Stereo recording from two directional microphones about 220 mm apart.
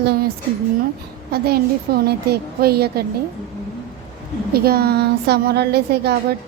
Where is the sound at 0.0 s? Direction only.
45° right (ahead or behind).